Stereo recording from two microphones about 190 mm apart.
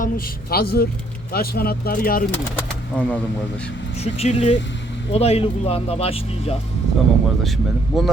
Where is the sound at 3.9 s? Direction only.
35° left (ahead or behind).